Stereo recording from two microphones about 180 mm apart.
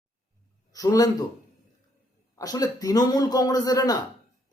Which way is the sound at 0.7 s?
20° left (ahead or behind).